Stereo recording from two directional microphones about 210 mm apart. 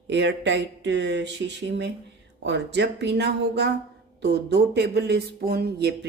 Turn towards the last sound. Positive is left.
turn(degrees=-50)  # may be behind; listen again after turning